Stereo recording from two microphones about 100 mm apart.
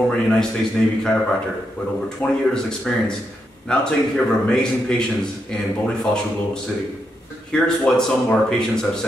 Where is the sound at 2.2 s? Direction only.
10° left (ahead or behind).